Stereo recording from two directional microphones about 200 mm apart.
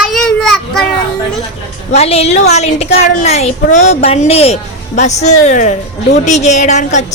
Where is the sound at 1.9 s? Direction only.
30° left (ahead or behind).